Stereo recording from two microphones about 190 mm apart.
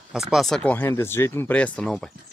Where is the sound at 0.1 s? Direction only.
Centre (ahead or behind).